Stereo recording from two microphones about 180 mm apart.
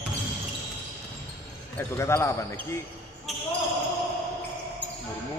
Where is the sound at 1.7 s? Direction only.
15° left (ahead or behind).